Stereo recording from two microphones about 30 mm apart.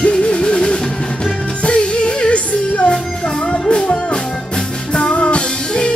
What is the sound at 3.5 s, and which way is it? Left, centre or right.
Music, left.